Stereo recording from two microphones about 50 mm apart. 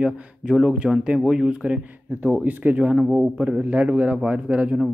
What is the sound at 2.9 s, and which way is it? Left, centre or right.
A man's voice, centre.